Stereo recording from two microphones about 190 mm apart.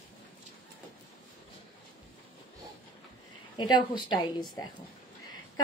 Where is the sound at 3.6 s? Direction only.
25° left (ahead or behind).